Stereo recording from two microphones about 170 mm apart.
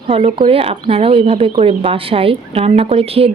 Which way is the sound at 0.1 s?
35° right (ahead or behind).